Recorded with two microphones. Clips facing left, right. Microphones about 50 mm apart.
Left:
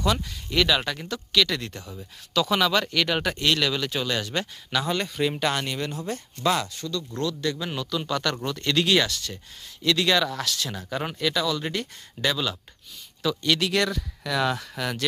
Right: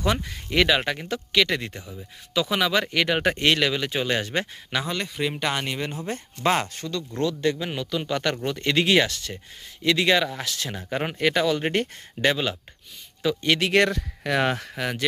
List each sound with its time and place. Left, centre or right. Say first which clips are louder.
0.0 s speech: even; right
1.8 s speech: even; centre
3.2 s speech: right 3 dB; right
4.9 s speech: left 2 dB; centre; by 7.0 s right
7.2 s speech: right 4 dB; right
11.2 s speech: right 4 dB; right
14.8 s speech: right 1 dB; right